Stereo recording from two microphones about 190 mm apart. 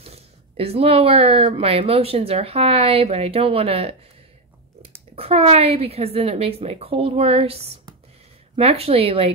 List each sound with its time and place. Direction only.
0.0 s speech: 30° right (ahead or behind)
5.1 s speech: 30° right (ahead or behind)